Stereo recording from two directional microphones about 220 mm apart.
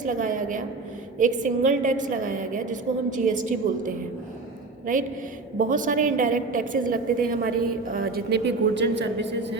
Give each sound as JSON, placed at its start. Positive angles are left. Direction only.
{"t": 0.0, "sound": "a woman's voice", "side_deg": -35}